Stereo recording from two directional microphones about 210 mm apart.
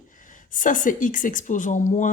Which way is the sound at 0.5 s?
40° left (ahead or behind).